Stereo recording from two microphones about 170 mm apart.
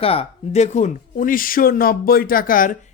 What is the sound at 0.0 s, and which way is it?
Speech, 35° left (ahead or behind).